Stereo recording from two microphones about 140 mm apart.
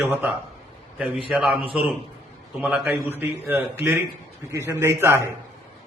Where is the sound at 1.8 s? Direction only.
10° right (ahead or behind).